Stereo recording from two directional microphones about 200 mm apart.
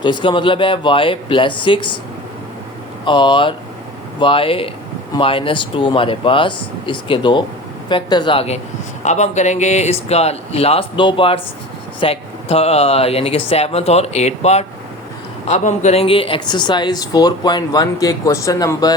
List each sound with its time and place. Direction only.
0.0 s speech: 25° left (ahead or behind)
3.0 s speech: 25° left (ahead or behind)